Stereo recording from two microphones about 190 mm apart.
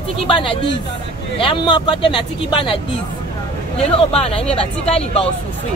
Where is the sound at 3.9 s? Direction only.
30° left (ahead or behind).